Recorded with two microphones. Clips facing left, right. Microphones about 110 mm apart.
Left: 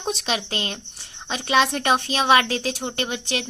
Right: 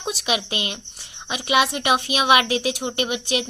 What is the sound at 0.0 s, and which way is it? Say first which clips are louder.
A woman's voice: right 1 dB; 5° right (ahead or behind).